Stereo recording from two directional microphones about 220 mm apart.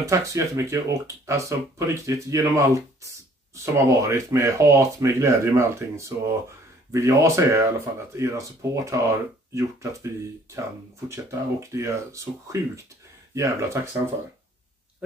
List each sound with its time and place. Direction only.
0.0 s speech: 15° right (ahead or behind)